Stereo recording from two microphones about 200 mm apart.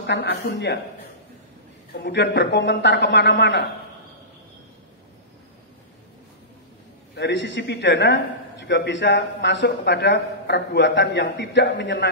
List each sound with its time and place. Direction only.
0.0 s a man's voice: 60° left (ahead or behind)
2.0 s a man's voice: 60° left (ahead or behind)
7.2 s a man's voice: 60° left (ahead or behind)